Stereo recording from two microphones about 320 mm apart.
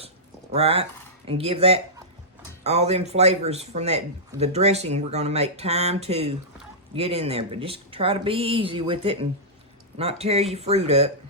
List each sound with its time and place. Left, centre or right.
0.5 s speech: centre